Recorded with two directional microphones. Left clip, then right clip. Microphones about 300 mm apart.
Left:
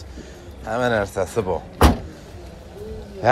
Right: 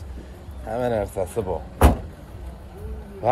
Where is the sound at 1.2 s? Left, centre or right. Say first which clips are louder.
Left 3 dB; left.